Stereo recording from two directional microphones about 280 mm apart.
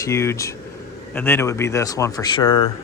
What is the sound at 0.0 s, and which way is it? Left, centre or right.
Speech, centre.